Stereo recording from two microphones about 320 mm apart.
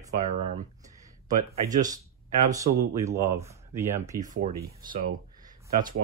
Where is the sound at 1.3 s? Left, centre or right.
Right.